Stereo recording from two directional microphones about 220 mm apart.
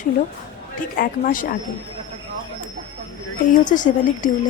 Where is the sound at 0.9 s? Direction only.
40° left (ahead or behind).